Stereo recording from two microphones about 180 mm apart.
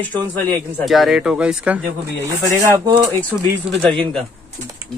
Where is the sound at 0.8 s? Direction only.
Centre (ahead or behind).